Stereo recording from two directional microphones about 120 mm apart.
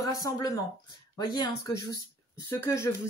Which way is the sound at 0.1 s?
30° left (ahead or behind).